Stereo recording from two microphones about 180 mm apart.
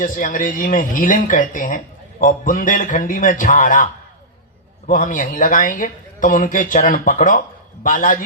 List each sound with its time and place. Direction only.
0.0 s speech: 50° left (ahead or behind)
4.9 s speech: 45° left (ahead or behind)